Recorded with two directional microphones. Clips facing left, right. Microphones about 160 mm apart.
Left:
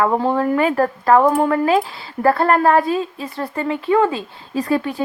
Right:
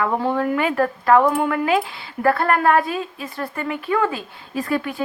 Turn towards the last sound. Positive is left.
turn(degrees=30)  # may be behind; listen again after turning